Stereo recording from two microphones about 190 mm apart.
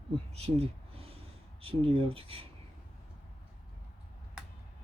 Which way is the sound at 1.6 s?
30° right (ahead or behind).